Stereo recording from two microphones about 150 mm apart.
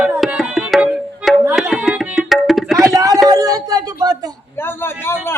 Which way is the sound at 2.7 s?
20° right (ahead or behind).